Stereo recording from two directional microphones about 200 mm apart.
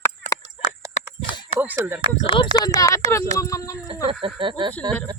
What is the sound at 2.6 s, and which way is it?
Speech, 15° left (ahead or behind).